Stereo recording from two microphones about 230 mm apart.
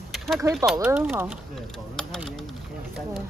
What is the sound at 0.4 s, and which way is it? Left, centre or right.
Speech, centre.